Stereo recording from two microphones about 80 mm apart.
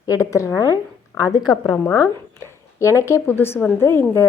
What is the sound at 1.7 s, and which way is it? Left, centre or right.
Speech, centre.